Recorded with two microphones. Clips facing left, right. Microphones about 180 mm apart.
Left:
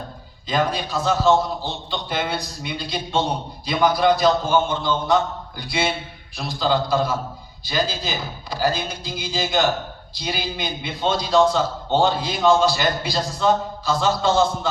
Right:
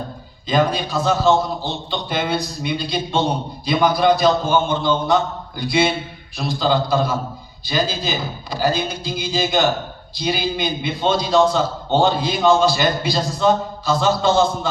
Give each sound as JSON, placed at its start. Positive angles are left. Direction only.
{"t": 0.4, "sound": "a man's voice", "side_deg": -20}
{"t": 5.5, "sound": "a sound", "side_deg": -20}
{"t": 6.3, "sound": "a man's voice", "side_deg": -20}